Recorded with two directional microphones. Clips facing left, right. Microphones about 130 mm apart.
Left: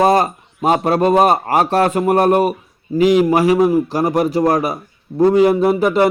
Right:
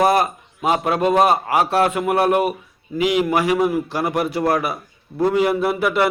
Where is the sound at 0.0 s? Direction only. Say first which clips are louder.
Left 3 dB; 35° left (ahead or behind).